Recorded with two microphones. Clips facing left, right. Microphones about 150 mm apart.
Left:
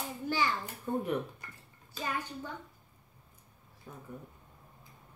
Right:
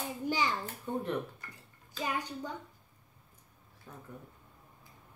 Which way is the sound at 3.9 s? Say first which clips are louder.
Left 1 dB; 10° left (ahead or behind).